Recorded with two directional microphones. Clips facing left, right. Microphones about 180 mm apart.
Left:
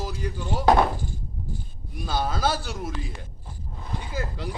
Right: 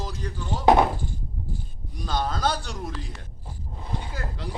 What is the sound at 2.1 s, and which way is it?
Speech, 5° left (ahead or behind).